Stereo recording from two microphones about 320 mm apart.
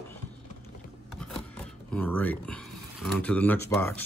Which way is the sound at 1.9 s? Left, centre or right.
Centre.